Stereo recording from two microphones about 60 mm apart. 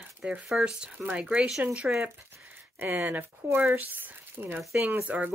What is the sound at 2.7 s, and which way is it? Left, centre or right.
Speech, right.